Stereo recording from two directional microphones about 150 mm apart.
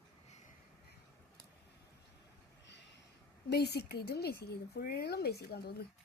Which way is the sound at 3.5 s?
90° left.